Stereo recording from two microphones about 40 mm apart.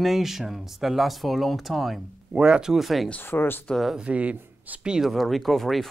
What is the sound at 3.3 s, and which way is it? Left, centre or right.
Speech, left.